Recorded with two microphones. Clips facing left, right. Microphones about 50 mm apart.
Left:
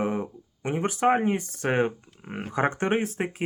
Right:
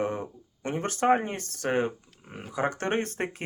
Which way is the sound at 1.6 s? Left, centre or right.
Left.